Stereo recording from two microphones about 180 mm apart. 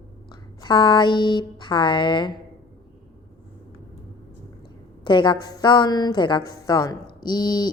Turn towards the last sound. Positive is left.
turn(degrees=25)  # may be behind; listen again after turning